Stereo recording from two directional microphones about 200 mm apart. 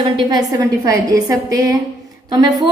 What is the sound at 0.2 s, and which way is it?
A woman's voice, 20° right (ahead or behind).